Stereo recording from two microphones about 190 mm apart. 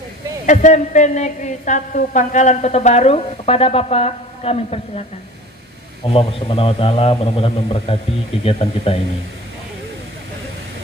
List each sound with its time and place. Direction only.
0.5 s a woman's voice: 40° left (ahead or behind)
6.0 s a man's voice: 30° left (ahead or behind)